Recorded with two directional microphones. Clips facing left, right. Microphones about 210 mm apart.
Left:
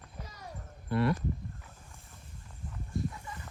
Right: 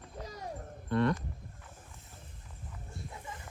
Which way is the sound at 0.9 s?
5° left (ahead or behind).